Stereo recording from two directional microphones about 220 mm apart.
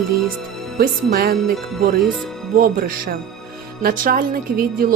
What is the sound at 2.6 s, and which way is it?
A woman's voice, 40° right (ahead or behind).